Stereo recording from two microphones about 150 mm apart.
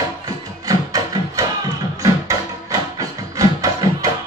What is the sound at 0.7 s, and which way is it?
Music, 25° right (ahead or behind).